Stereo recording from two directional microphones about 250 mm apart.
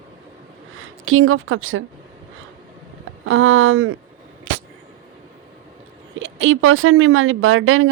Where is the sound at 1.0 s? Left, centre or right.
Right.